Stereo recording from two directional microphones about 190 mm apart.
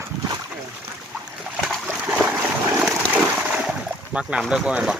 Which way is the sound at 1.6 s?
Centre (ahead or behind).